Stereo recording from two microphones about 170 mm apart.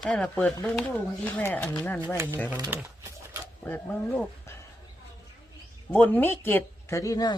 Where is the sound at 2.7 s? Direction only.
10° right (ahead or behind).